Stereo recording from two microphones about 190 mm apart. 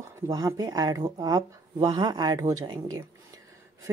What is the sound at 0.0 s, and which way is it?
A woman's voice, 15° right (ahead or behind).